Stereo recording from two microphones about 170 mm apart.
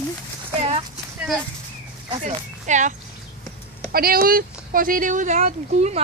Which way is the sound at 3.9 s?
60° right (ahead or behind).